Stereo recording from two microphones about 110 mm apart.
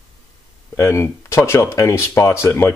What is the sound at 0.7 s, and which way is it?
Speech, 25° left (ahead or behind).